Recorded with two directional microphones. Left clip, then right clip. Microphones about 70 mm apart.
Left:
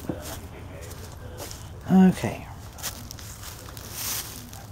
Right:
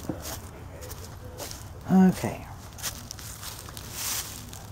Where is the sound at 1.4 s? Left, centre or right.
Centre.